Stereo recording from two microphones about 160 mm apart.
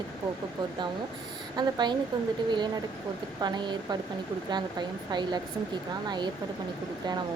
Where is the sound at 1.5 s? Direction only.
25° right (ahead or behind).